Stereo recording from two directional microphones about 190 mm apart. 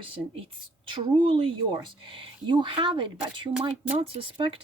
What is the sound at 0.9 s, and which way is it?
Speech, 25° right (ahead or behind).